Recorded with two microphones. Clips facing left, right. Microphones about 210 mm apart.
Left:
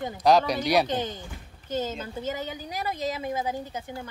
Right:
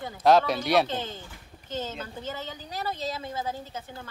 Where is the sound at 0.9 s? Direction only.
15° left (ahead or behind).